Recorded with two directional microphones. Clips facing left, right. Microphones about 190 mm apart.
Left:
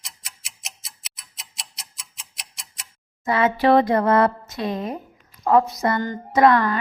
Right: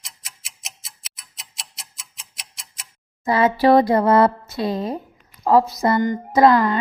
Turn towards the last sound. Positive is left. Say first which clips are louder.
# right 2 dB
turn(degrees=-25)  # may be behind; listen again after turning